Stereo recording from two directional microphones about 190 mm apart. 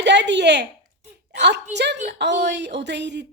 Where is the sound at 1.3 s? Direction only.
65° right (ahead or behind).